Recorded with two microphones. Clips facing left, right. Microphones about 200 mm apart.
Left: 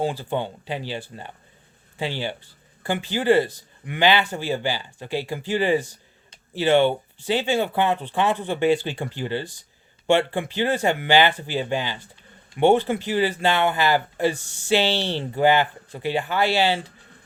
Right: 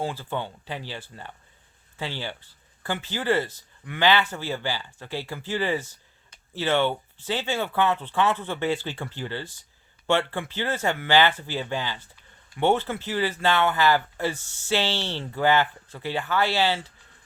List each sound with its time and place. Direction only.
0.0 s speech: 15° left (ahead or behind)